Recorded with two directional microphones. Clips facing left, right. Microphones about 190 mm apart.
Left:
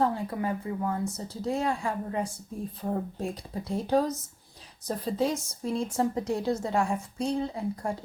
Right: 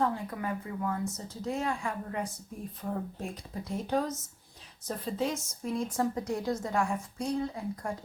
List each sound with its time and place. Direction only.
0.0 s a woman's voice: 30° left (ahead or behind)